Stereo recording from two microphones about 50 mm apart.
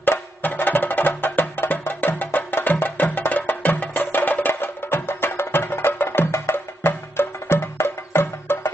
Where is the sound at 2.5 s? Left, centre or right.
Left.